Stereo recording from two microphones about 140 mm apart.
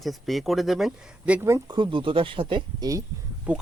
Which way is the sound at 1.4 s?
20° right (ahead or behind).